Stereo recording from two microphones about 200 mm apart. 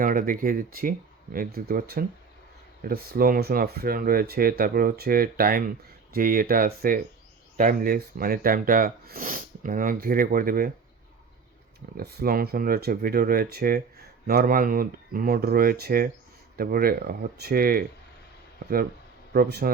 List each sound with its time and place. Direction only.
0.0 s speech: 45° right (ahead or behind)
11.9 s speech: 50° right (ahead or behind)
19.3 s speech: 50° right (ahead or behind)